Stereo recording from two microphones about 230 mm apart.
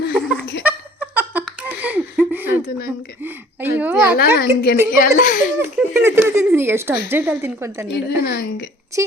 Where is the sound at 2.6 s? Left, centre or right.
Left.